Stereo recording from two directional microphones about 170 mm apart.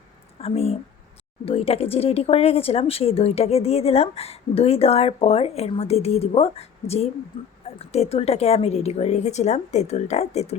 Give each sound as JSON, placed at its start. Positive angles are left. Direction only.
{"t": 0.3, "sound": "speech", "side_deg": 35}